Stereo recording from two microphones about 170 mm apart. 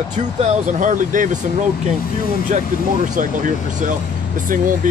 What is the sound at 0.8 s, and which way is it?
Speech, 50° right (ahead or behind).